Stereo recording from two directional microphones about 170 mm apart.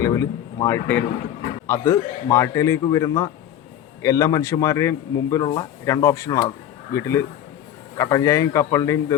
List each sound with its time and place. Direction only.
0.0 s a man's voice: 20° left (ahead or behind)